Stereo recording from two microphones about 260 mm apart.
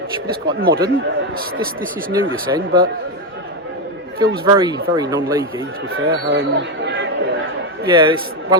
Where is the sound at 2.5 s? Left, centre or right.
Centre.